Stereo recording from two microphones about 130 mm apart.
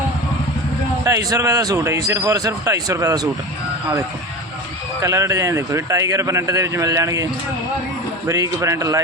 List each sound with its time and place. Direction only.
1.0 s a man's voice: 25° right (ahead or behind)
4.9 s a man's voice: 25° right (ahead or behind)
8.3 s a man's voice: 25° right (ahead or behind)